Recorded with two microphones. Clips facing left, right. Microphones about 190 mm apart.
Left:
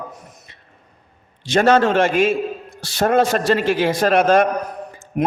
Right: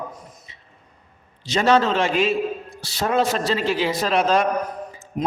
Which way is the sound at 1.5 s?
50° left (ahead or behind).